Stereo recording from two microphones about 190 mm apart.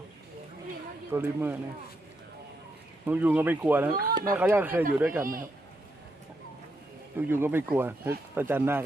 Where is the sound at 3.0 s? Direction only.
10° right (ahead or behind).